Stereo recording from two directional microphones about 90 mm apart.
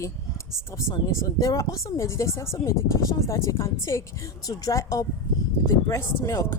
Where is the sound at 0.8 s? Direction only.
35° left (ahead or behind).